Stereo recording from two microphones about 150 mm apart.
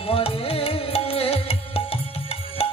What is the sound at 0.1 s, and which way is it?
Music, 40° left (ahead or behind).